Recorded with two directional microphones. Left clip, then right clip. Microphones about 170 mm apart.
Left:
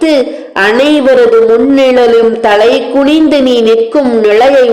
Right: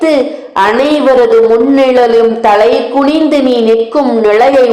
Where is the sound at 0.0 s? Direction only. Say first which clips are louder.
Left 1 dB; 30° left (ahead or behind).